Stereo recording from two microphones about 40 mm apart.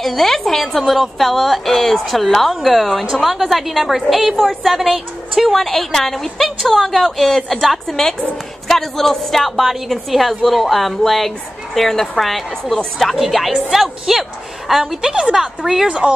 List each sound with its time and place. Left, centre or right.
0.0 s a woman's voice: centre
4.4 s a woman's voice: centre
14.8 s a woman's voice: centre
15.9 s speech: right